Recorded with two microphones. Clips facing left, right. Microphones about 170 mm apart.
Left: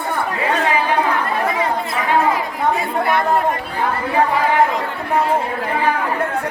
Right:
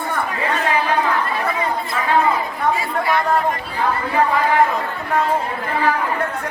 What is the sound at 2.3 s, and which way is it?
Chatter, 55° left (ahead or behind).